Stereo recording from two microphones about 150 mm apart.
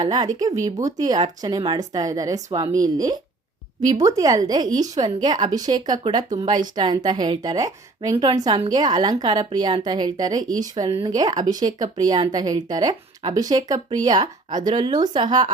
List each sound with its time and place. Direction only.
0.0 s speech: 25° right (ahead or behind)